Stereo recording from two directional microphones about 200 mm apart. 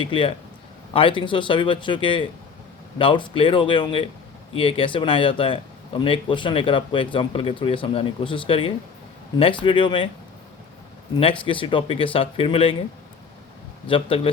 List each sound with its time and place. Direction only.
0.0 s speech: 25° left (ahead or behind)
11.2 s speech: 25° left (ahead or behind)
13.8 s speech: 25° left (ahead or behind)